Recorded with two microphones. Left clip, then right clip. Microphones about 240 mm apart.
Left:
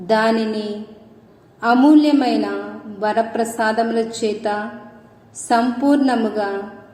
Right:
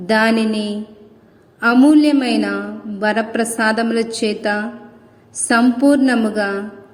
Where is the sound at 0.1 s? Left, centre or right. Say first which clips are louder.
Right 1 dB; right.